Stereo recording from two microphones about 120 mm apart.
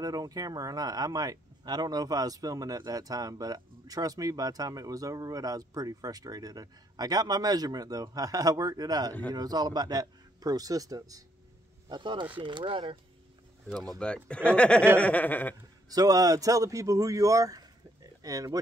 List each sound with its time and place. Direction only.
0.0 s speech: 30° right (ahead or behind)
11.9 s speech: 40° right (ahead or behind)
13.8 s speech: 10° left (ahead or behind)
15.9 s speech: 30° right (ahead or behind)